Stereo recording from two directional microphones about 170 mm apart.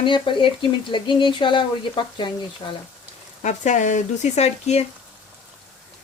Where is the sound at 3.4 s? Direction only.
45° left (ahead or behind).